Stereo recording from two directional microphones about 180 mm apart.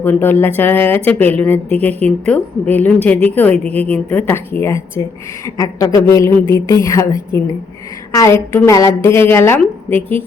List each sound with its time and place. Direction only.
0.0 s a woman's voice: 10° left (ahead or behind)